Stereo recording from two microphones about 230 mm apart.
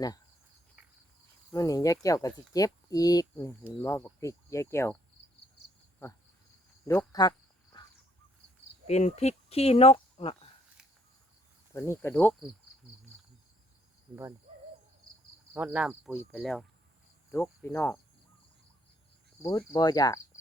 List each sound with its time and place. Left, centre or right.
1.5 s speech: centre
6.8 s speech: centre
7.2 s cricket: centre
8.9 s speech: left
11.7 s speech: centre
15.5 s cricket: centre
17.3 s speech: centre
19.4 s speech: centre